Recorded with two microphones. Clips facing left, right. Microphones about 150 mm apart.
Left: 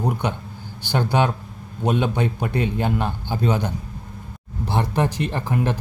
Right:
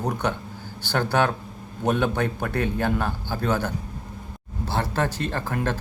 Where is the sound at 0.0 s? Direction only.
10° left (ahead or behind).